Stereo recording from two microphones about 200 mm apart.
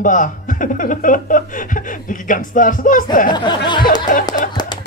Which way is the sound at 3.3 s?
20° left (ahead or behind).